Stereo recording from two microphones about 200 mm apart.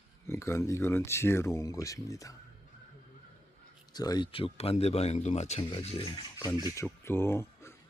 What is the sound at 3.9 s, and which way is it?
Speech, 20° left (ahead or behind).